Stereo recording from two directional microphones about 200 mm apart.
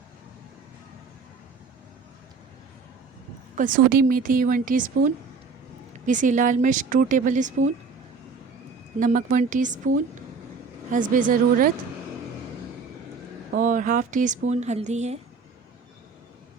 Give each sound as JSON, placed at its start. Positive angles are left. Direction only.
{"t": 3.5, "sound": "a woman's voice", "side_deg": -40}
{"t": 9.0, "sound": "speech", "side_deg": -40}
{"t": 11.1, "sound": "a woman's voice", "side_deg": -40}
{"t": 13.6, "sound": "speech", "side_deg": -40}